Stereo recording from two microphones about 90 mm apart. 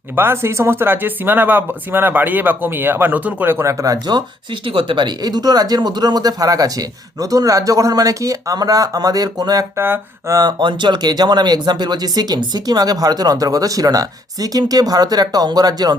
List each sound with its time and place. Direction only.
0.2 s speech: 25° right (ahead or behind)
4.6 s speech: 75° right (ahead or behind); by 9.6 s 45° right (ahead or behind)
9.7 s speech: 25° right (ahead or behind)
10.2 s speech: 40° right (ahead or behind)
10.6 s speech: 60° right (ahead or behind)